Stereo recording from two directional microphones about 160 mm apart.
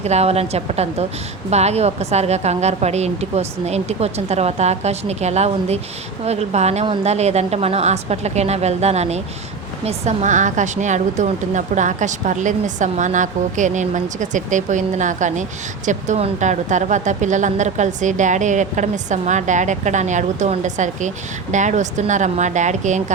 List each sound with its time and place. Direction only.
0.0 s a woman's voice: 40° right (ahead or behind)